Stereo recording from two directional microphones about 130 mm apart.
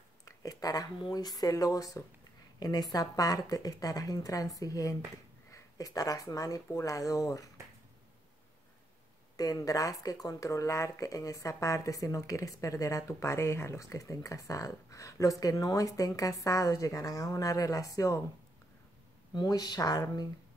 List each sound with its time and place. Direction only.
0.2 s speech: 25° left (ahead or behind)
9.4 s speech: 25° left (ahead or behind)
19.3 s speech: 30° left (ahead or behind)